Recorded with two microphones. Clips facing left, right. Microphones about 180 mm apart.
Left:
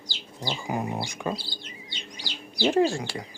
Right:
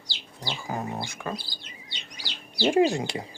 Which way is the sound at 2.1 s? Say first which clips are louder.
Even; 10° right (ahead or behind).